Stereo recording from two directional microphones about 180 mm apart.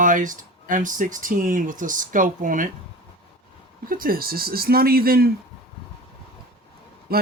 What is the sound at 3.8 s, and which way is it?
Speech, 50° right (ahead or behind).